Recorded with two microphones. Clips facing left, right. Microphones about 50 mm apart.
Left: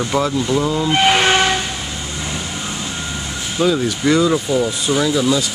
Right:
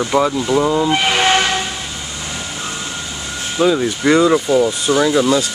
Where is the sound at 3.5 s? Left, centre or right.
Centre.